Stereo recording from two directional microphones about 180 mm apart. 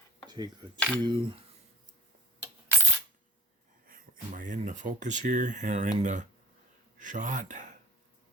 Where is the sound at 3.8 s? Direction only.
50° right (ahead or behind).